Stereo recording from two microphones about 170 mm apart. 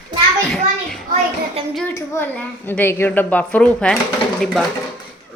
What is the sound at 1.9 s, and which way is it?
A woman's voice, 15° left (ahead or behind).